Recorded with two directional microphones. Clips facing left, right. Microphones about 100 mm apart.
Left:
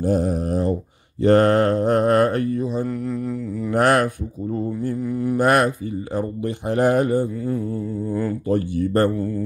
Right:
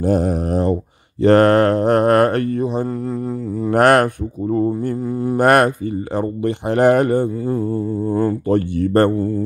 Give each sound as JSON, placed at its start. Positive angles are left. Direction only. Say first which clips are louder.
{"t": 0.0, "sound": "speech", "louder": "right 3 dB", "side_deg": -70}
{"t": 1.2, "sound": "speech", "louder": "right 3 dB", "side_deg": -85}
{"t": 2.9, "sound": "mantra", "louder": "right 2 dB", "side_deg": -30}
{"t": 3.7, "sound": "speech", "louder": "right 5 dB", "side_deg": -65}
{"t": 4.9, "sound": "speech", "louder": "right 2 dB", "side_deg": -30}
{"t": 5.4, "sound": "speech", "louder": "right 5 dB", "side_deg": -60}
{"t": 7.7, "sound": "mantra", "louder": "right 5 dB", "side_deg": -30}
{"t": 8.5, "sound": "speech", "louder": "right 4 dB", "side_deg": -65}
{"t": 9.1, "sound": "mantra", "louder": "right 5 dB", "side_deg": -30}